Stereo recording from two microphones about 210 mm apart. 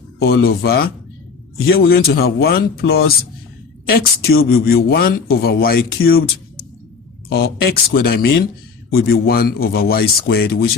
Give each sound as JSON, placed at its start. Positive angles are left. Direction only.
{"t": 0.2, "sound": "a man's voice", "side_deg": 50}
{"t": 4.3, "sound": "a man's voice", "side_deg": 45}
{"t": 7.3, "sound": "a man's voice", "side_deg": 50}